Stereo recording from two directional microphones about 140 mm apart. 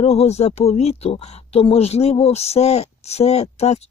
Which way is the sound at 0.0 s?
45° left (ahead or behind).